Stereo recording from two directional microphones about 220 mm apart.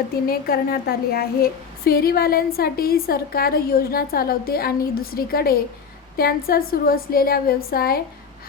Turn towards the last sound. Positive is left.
turn(degrees=45)  # may be behind; listen again after turning